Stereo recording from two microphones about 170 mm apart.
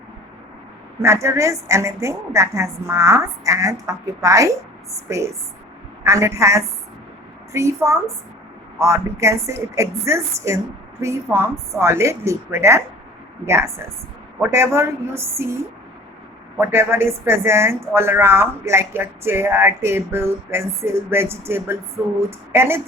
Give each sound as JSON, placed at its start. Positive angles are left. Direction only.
{"t": 1.0, "sound": "speech", "side_deg": -15}